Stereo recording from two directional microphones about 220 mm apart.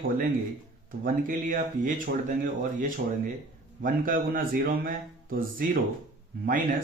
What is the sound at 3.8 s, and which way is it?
Speech, 40° right (ahead or behind).